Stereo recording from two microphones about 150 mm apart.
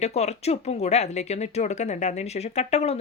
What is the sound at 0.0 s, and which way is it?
Speech, 45° left (ahead or behind).